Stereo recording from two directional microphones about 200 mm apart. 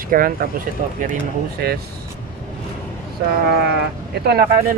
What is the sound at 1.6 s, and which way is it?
Speech, 50° right (ahead or behind).